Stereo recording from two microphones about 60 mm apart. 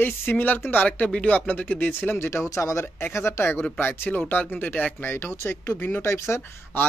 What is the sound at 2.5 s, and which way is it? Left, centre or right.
Speech, left.